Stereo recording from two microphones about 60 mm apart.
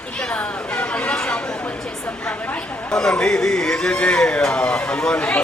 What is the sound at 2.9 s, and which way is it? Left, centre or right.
A man's voice, centre.